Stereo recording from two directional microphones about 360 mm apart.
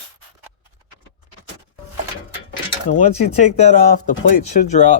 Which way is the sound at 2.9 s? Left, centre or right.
Centre.